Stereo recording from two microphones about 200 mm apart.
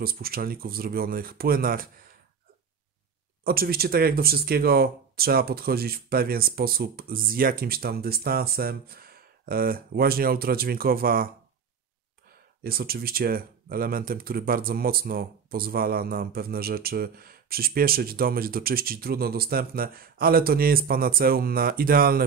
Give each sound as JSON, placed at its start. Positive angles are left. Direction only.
{"t": 0.0, "sound": "speech", "side_deg": -50}
{"t": 3.4, "sound": "speech", "side_deg": -50}
{"t": 12.6, "sound": "speech", "side_deg": -50}